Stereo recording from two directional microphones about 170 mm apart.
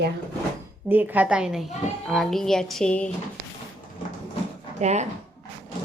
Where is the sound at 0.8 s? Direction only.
10° right (ahead or behind); by 3.1 s 5° left (ahead or behind).